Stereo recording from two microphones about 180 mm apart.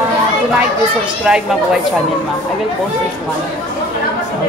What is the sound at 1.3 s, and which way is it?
Speech, 5° right (ahead or behind).